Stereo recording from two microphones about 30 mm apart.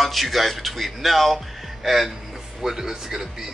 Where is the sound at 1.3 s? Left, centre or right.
Centre.